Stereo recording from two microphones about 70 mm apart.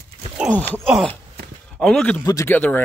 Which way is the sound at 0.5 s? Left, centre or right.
Left.